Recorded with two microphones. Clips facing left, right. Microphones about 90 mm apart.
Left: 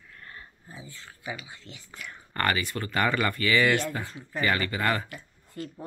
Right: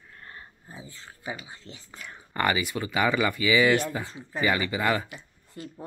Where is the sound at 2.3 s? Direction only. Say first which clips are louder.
Right 2 dB; 10° right (ahead or behind).